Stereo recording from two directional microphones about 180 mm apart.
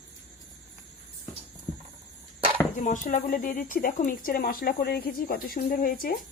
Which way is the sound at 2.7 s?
45° left (ahead or behind).